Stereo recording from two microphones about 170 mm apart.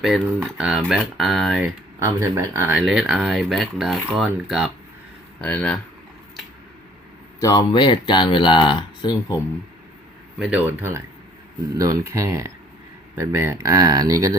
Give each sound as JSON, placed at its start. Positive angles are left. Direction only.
{"t": 0.4, "sound": "speech", "side_deg": -5}
{"t": 2.0, "sound": "speech", "side_deg": -15}
{"t": 2.7, "sound": "speech", "side_deg": -5}
{"t": 5.4, "sound": "speech", "side_deg": 10}
{"t": 7.3, "sound": "speech", "side_deg": 25}
{"t": 10.3, "sound": "speech", "side_deg": -5}